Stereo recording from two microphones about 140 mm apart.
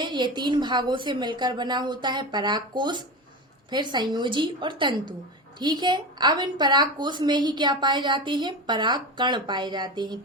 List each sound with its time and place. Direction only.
0.0 s a woman's voice: 35° right (ahead or behind)